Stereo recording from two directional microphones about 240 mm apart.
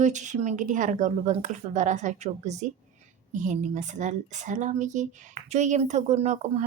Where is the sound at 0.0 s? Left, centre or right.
Right.